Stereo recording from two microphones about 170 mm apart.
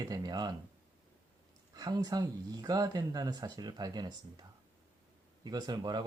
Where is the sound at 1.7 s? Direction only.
25° right (ahead or behind).